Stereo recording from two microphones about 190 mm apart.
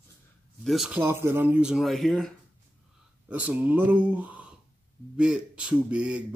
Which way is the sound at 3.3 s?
5° right (ahead or behind).